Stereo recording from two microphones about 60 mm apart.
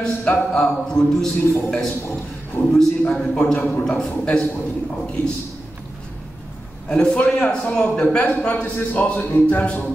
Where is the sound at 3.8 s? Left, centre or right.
Centre.